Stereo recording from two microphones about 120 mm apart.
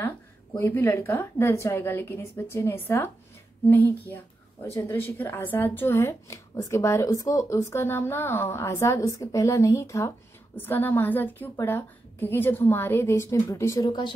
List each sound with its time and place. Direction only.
0.0 s a woman's voice: 20° left (ahead or behind); by 14.1 s 35° left (ahead or behind)